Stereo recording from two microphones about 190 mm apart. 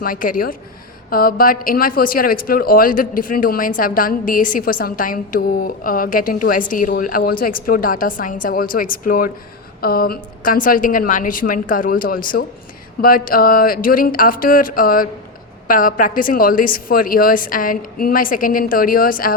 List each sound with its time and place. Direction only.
0.0 s speech: 45° left (ahead or behind)